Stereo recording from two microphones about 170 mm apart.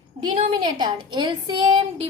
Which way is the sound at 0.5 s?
25° right (ahead or behind).